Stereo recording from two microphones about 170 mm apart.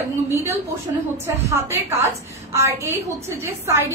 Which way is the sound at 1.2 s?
15° right (ahead or behind).